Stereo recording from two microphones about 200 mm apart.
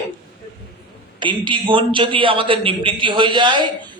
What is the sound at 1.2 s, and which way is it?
Speech, 25° right (ahead or behind).